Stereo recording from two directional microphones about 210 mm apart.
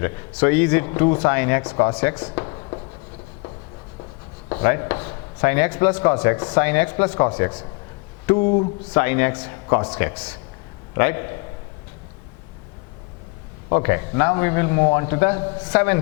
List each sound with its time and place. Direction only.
0.4 s speech: 15° left (ahead or behind)
0.9 s a man's voice: 25° left (ahead or behind)
4.4 s a man's voice: 20° left (ahead or behind)
8.4 s a man's voice: 30° left (ahead or behind)
9.0 s speech: 15° left (ahead or behind)
13.7 s a man's voice: 20° left (ahead or behind)